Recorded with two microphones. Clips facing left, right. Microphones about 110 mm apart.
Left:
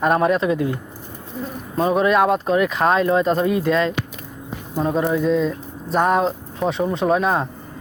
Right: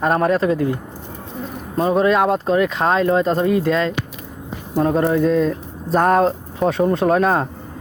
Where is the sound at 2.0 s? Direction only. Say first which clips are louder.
Right 1 dB; 30° right (ahead or behind).